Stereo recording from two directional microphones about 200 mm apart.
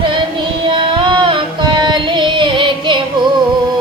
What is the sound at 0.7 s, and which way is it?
Music, 25° right (ahead or behind).